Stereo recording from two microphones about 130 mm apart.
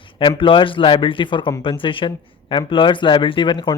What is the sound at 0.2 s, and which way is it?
Speech, 40° left (ahead or behind).